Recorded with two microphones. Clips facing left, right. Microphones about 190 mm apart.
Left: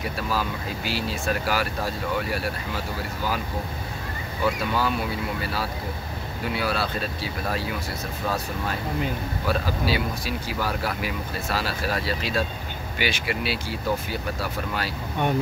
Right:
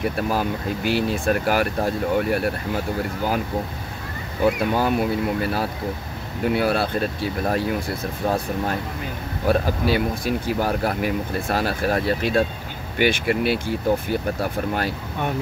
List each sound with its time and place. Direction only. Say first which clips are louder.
0.0 s speech: right 5 dB; 50° right (ahead or behind)
4.5 s speech: right 5 dB; 55° right (ahead or behind)